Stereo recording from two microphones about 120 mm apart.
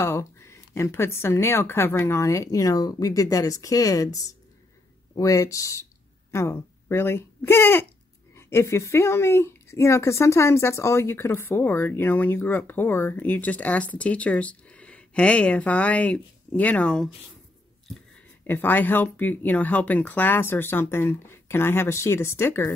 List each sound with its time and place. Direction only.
0.0 s speech: 20° left (ahead or behind)
18.5 s speech: 15° left (ahead or behind)